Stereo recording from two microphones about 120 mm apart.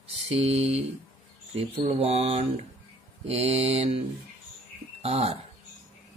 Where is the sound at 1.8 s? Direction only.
55° right (ahead or behind).